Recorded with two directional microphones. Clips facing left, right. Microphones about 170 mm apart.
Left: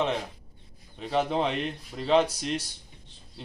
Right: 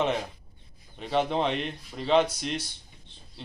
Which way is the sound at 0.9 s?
Centre (ahead or behind).